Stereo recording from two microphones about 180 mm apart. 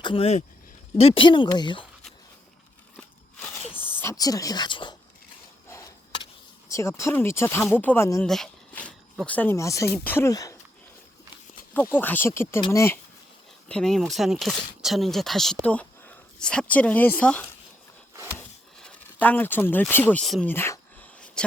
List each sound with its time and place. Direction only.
0.0 s speech: 30° left (ahead or behind)
4.0 s speech: 20° left (ahead or behind)
5.6 s a sound: 15° left (ahead or behind)
6.7 s speech: 15° left (ahead or behind)
11.7 s speech: 10° left (ahead or behind)
13.7 s speech: 5° left (ahead or behind)
18.3 s a sound: 10° left (ahead or behind)
20.5 s speech: 10° left (ahead or behind)